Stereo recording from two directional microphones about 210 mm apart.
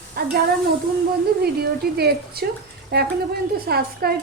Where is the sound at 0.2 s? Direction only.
45° right (ahead or behind).